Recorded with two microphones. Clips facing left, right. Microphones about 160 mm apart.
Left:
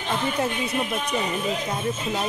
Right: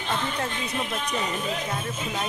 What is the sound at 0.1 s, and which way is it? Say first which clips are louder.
Speech: left 4 dB; 15° left (ahead or behind).